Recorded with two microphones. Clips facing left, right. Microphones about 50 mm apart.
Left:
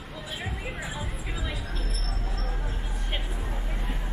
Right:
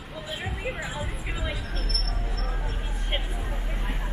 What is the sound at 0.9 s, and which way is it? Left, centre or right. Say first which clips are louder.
Vehicle: right 2 dB; centre.